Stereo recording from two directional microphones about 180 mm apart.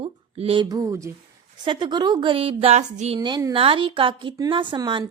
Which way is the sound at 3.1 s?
25° right (ahead or behind).